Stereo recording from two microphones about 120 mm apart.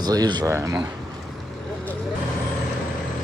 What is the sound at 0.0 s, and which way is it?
Speech, 35° right (ahead or behind).